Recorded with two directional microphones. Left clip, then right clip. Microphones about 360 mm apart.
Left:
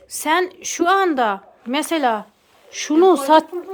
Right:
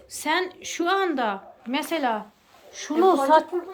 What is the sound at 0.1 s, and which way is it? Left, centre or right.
Speech, centre.